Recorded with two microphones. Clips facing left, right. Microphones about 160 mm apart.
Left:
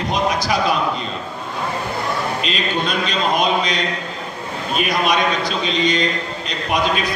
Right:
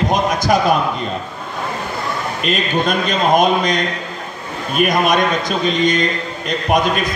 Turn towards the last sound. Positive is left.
turn(degrees=-50)  # may be behind; listen again after turning